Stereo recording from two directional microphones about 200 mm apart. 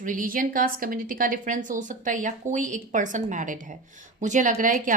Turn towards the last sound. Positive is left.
turn(degrees=-40)  # may be behind; listen again after turning